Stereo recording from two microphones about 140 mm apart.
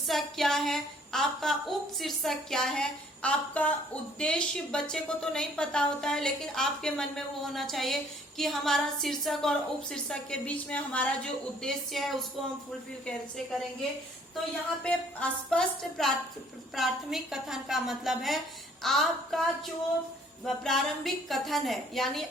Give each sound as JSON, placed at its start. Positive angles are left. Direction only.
{"t": 0.1, "sound": "a woman's voice", "side_deg": 0}
{"t": 14.8, "sound": "a woman's voice", "side_deg": 5}